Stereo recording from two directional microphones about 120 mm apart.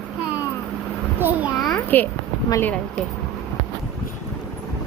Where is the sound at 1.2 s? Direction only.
15° right (ahead or behind).